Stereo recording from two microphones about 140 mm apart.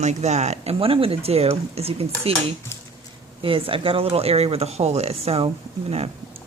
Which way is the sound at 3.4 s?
40° right (ahead or behind).